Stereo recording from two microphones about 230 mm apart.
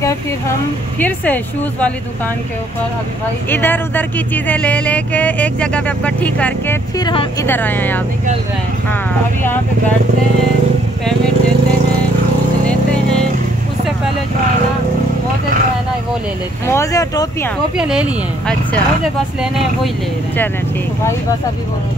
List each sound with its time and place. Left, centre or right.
0.9 s speech: centre
3.4 s speech: centre
7.0 s speech: centre
16.6 s speech: centre
17.7 s speech: centre